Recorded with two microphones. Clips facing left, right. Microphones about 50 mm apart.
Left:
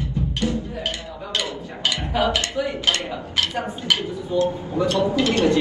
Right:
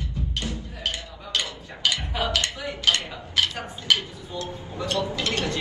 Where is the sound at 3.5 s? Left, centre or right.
Left.